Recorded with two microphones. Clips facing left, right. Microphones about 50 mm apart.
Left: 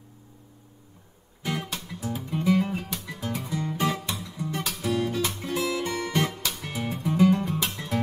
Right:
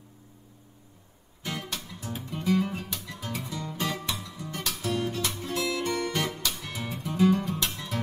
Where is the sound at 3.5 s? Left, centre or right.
Left.